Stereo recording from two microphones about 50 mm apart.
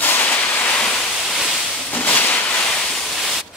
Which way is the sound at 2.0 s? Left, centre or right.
Left.